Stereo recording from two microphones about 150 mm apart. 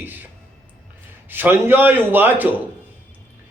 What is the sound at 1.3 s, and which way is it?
A man's voice, 15° right (ahead or behind).